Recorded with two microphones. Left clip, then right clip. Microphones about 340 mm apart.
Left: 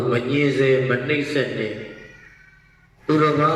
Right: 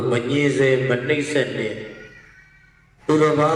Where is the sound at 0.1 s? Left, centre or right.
Centre.